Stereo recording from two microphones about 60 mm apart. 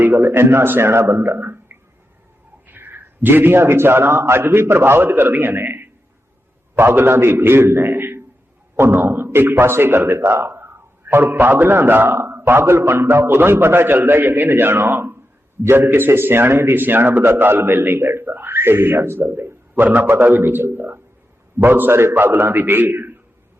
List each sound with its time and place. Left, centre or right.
0.0 s a man's voice: right
1.4 s a sound: right
2.6 s a man's voice: right